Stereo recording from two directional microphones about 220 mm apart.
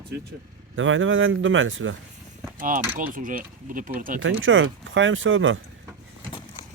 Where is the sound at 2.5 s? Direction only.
40° right (ahead or behind).